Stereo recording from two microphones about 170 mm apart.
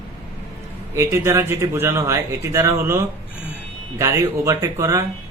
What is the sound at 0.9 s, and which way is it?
Speech, 15° right (ahead or behind).